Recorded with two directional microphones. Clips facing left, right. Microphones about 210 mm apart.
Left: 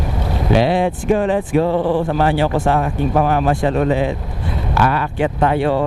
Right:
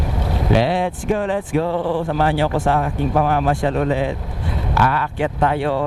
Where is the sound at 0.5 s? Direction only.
10° left (ahead or behind).